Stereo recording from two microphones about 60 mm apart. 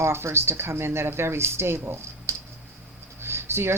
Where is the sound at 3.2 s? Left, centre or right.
Right.